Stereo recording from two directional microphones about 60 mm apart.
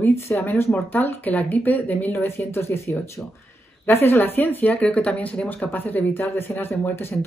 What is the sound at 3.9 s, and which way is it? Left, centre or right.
Speech, left.